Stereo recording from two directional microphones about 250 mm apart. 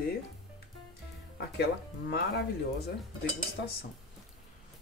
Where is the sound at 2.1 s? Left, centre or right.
Left.